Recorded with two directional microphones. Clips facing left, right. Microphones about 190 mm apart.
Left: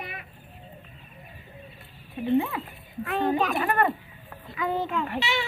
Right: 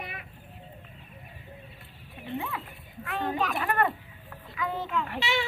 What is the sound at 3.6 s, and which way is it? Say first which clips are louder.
Speech: left 3 dB; 10° left (ahead or behind).